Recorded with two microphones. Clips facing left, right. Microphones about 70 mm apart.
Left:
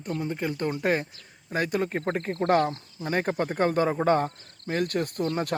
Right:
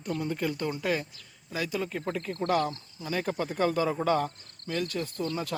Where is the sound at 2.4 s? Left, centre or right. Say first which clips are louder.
Left 5 dB; left.